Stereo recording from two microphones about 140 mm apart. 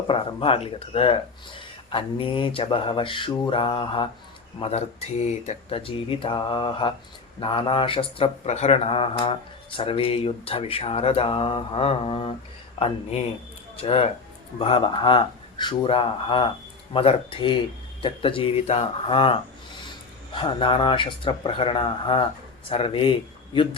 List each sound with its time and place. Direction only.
0.1 s speech: 40° left (ahead or behind)